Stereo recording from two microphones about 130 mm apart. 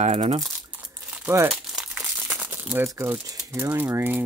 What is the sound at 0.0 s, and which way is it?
Speech, 55° right (ahead or behind).